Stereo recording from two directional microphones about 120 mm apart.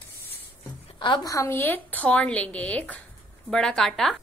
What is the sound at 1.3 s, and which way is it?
A woman's voice, 25° left (ahead or behind).